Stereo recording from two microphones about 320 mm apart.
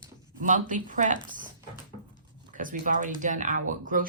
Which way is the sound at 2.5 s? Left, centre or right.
Right.